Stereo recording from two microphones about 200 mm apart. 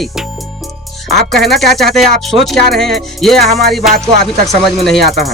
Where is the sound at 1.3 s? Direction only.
Centre (ahead or behind).